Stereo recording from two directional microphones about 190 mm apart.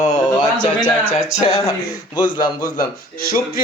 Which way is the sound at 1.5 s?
20° left (ahead or behind).